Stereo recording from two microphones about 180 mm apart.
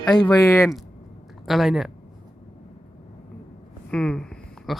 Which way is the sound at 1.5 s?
Centre (ahead or behind).